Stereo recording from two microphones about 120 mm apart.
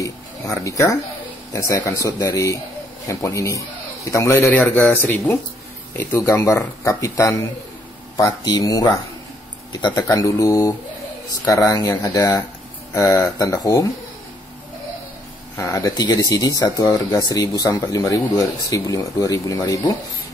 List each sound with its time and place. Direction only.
0.0 s speech: 25° left (ahead or behind)
4.5 s speech: 15° left (ahead or behind)
15.5 s speech: 25° left (ahead or behind)